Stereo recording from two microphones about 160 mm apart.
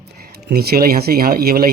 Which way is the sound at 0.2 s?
75° right (ahead or behind).